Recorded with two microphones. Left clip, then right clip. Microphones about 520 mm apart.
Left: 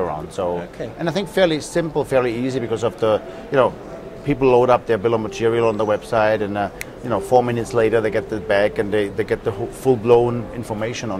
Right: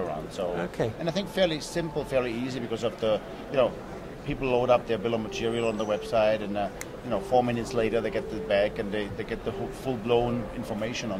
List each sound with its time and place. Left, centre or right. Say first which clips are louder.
1.0 s a man's voice: left 10 dB; left